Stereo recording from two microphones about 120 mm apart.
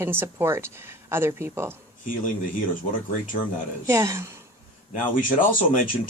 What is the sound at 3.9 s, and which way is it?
Speech, 25° right (ahead or behind).